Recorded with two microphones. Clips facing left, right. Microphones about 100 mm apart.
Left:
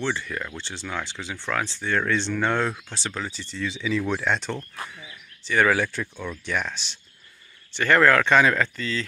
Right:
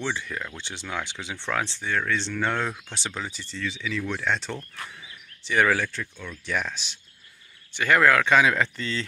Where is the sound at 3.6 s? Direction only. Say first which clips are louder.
Left 4 dB; 20° left (ahead or behind).